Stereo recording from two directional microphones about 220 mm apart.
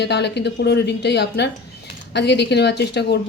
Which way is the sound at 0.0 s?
50° left (ahead or behind).